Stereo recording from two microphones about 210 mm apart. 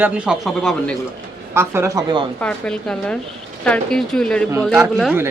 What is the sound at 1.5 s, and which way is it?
Speech, 10° right (ahead or behind).